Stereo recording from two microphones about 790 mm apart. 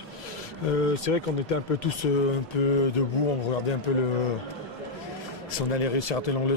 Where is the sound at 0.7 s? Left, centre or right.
Left.